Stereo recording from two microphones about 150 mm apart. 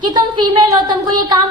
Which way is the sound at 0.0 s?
30° right (ahead or behind).